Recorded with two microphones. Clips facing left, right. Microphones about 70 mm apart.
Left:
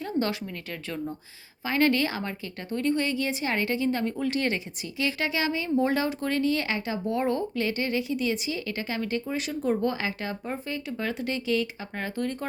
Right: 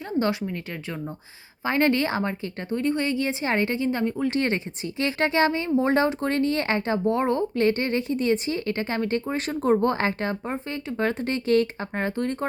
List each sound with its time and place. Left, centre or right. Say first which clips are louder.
0.0 s a woman's voice: right 3 dB; right
3.8 s a woman's voice: right 2 dB; centre
4.4 s speech: right 3 dB; right